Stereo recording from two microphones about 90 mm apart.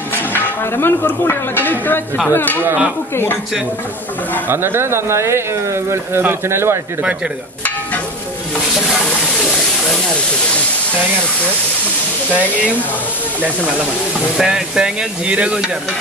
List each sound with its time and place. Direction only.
0.3 s speech: 20° left (ahead or behind)
2.6 s speech: 20° right (ahead or behind)
4.5 s speech: 25° right (ahead or behind)
14.3 s speech: 5° right (ahead or behind)